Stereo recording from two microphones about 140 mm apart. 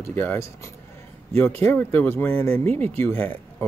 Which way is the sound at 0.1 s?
15° left (ahead or behind).